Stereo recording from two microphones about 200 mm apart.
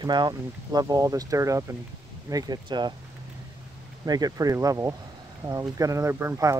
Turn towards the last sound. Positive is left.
turn(degrees=-15)  # may be behind; listen again after turning